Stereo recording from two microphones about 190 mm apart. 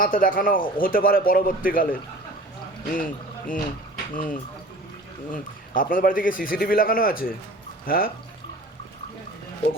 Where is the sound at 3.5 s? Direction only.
45° left (ahead or behind).